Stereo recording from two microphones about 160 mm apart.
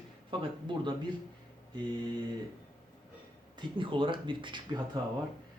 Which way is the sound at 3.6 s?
30° right (ahead or behind).